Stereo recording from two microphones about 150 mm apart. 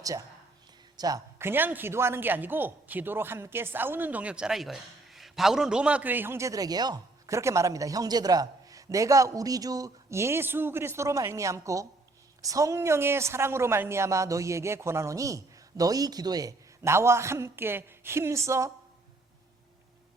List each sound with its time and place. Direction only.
0.0 s a woman's voice: 25° right (ahead or behind)